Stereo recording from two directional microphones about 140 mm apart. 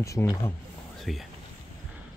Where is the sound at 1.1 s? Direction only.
Centre (ahead or behind).